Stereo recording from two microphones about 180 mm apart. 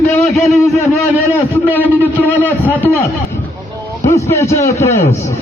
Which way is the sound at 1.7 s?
10° left (ahead or behind).